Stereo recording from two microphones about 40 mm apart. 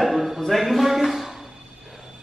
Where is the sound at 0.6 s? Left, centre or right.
Centre.